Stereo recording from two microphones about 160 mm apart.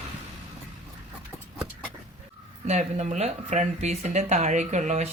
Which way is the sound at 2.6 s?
45° right (ahead or behind).